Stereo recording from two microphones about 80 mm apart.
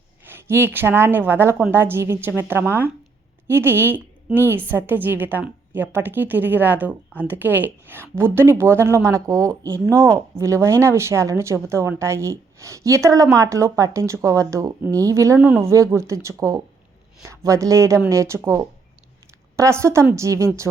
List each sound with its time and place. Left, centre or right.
0.3 s a woman's voice: right
15.4 s speech: centre
15.6 s a woman's voice: right